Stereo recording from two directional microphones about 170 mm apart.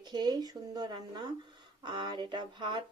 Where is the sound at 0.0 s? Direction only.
25° right (ahead or behind).